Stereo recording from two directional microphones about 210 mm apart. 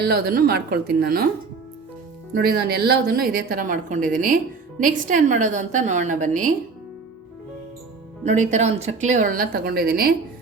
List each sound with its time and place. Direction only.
0.0 s speech: 50° right (ahead or behind)
2.3 s speech: 50° right (ahead or behind)
8.2 s speech: 35° right (ahead or behind)